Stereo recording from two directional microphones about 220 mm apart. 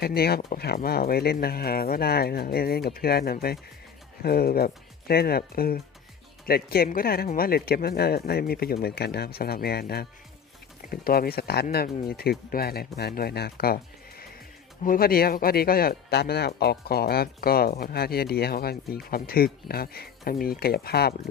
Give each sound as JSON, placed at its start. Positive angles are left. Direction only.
{"t": 0.0, "sound": "speech", "side_deg": 45}
{"t": 14.8, "sound": "speech", "side_deg": 40}